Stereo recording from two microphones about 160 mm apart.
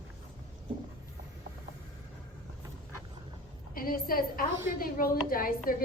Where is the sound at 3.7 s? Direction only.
65° left (ahead or behind).